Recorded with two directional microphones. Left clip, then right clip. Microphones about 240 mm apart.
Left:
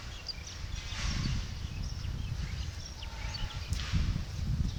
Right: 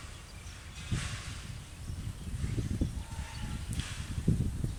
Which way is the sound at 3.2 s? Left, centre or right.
Right.